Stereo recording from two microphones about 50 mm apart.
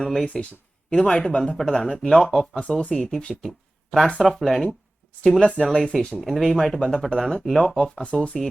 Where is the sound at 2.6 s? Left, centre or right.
Left.